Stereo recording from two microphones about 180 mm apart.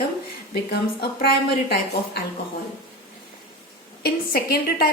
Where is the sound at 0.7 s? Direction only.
60° left (ahead or behind).